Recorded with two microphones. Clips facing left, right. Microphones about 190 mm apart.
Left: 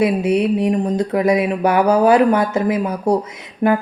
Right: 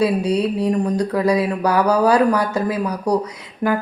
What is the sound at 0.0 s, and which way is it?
Speech, 20° left (ahead or behind).